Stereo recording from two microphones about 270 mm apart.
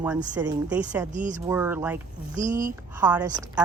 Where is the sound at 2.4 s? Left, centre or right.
Right.